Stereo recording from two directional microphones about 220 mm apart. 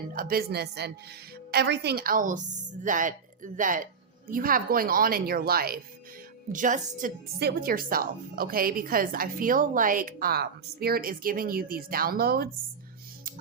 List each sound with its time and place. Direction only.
0.1 s speech: 40° right (ahead or behind)